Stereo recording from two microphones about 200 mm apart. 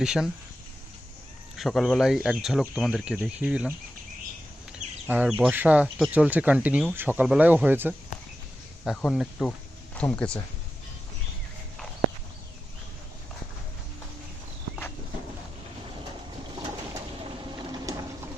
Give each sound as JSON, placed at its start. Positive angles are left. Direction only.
{"t": 0.0, "sound": "speech", "side_deg": -5}
{"t": 1.5, "sound": "speech", "side_deg": 0}
{"t": 5.0, "sound": "speech", "side_deg": -10}
{"t": 8.8, "sound": "speech", "side_deg": 0}
{"t": 17.7, "sound": "a sound", "side_deg": -20}